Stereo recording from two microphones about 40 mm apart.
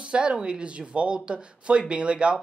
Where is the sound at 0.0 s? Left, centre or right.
Right.